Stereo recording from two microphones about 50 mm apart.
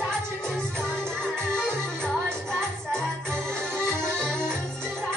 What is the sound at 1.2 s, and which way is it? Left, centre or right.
Music, centre.